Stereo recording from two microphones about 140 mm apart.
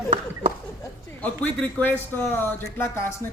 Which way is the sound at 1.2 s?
10° left (ahead or behind).